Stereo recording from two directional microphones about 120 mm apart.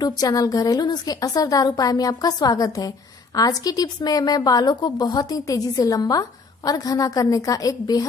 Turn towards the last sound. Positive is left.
turn(degrees=30)  # may be behind; listen again after turning